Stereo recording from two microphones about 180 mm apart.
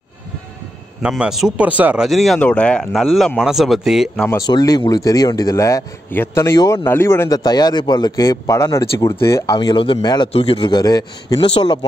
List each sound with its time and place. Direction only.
1.0 s speech: 5° right (ahead or behind)
4.3 s speech: 20° left (ahead or behind)
9.6 s speech: 25° left (ahead or behind)